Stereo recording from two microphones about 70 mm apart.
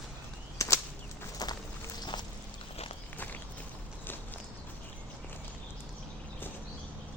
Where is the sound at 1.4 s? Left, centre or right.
Left.